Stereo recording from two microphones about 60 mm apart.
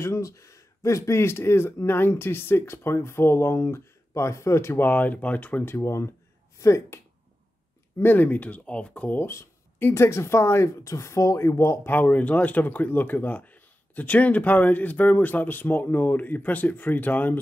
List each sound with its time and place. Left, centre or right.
0.0 s speech: left
4.1 s speech: left
4.8 s speech: left
5.7 s speech: left
8.0 s speech: left
9.2 s a sound: left
9.9 s speech: left
11.8 s speech: left